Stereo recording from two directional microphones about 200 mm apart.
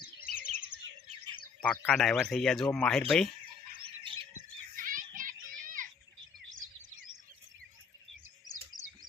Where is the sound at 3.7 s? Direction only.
25° right (ahead or behind).